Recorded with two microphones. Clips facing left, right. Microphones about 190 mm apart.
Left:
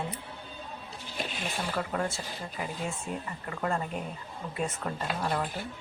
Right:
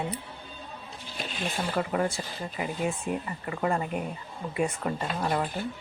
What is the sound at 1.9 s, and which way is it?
A woman's voice, 15° right (ahead or behind).